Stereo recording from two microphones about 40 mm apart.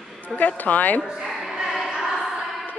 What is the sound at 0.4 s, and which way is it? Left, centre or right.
Speech, left.